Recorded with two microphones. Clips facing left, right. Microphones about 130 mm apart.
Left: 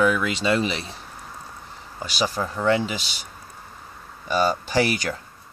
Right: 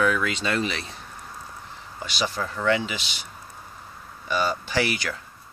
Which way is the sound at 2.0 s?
40° left (ahead or behind).